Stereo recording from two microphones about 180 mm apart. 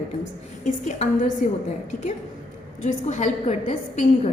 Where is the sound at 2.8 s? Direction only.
40° left (ahead or behind).